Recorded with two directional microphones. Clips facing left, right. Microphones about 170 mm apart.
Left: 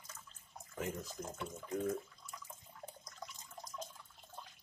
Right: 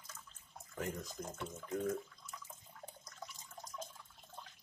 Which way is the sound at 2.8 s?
5° right (ahead or behind).